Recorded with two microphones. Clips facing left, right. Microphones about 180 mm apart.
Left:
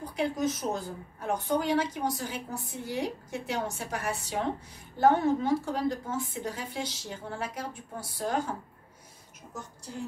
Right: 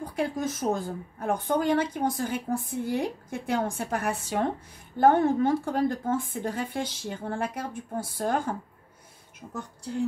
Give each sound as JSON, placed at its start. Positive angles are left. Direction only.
{"t": 0.0, "sound": "a woman's voice", "side_deg": -50}